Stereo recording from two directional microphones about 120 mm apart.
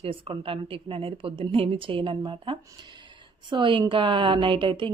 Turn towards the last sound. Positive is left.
turn(degrees=-45)  # may be behind; listen again after turning